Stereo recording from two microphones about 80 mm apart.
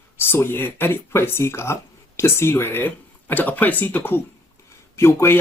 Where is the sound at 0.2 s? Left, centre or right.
Left.